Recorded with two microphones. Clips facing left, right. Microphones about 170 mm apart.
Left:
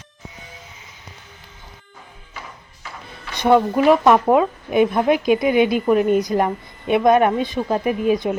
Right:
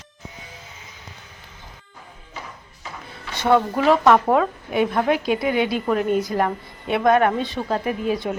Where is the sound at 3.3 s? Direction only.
15° left (ahead or behind).